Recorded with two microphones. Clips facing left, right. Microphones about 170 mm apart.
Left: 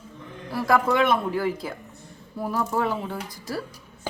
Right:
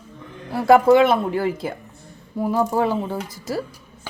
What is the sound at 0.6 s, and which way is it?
Speech, 30° right (ahead or behind).